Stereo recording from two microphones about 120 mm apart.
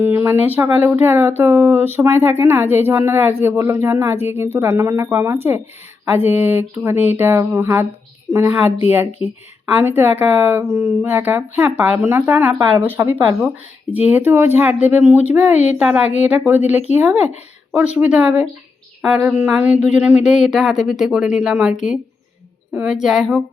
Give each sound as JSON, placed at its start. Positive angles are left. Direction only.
{"t": 0.0, "sound": "a woman's voice", "side_deg": -15}
{"t": 9.6, "sound": "a woman's voice", "side_deg": -15}